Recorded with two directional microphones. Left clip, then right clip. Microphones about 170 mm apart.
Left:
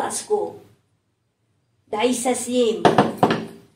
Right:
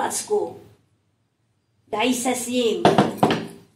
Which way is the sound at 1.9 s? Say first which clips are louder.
Left 1 dB; 35° left (ahead or behind).